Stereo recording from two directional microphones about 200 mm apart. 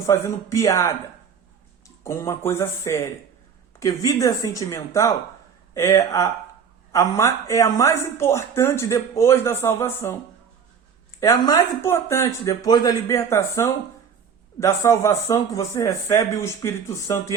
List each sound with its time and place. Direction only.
0.0 s speech: 15° left (ahead or behind)
2.0 s speech: 15° left (ahead or behind)
11.2 s speech: 20° left (ahead or behind)